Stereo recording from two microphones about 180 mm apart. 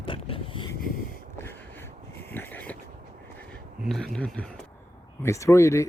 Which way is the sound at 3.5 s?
Centre (ahead or behind).